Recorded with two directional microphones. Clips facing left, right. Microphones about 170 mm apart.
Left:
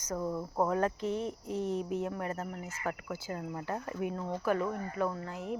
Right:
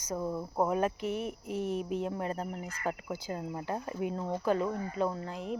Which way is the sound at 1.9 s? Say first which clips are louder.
Right 1 dB; 25° right (ahead or behind).